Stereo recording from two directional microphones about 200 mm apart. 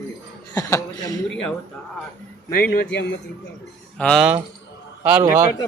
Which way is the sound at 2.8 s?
60° left (ahead or behind).